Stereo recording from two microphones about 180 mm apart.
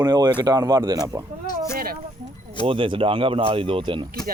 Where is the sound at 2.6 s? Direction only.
30° right (ahead or behind).